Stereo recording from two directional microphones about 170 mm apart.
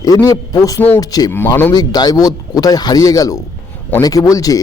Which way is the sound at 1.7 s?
25° left (ahead or behind).